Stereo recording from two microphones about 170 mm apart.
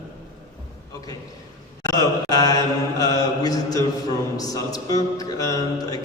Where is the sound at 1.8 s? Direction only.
20° left (ahead or behind).